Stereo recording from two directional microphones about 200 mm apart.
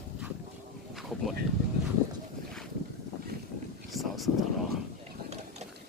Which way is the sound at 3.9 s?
Centre (ahead or behind).